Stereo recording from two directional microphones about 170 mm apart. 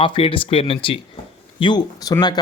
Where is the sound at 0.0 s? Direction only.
30° left (ahead or behind).